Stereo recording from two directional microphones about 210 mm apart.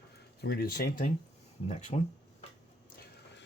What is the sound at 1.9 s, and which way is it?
Speech, 30° left (ahead or behind).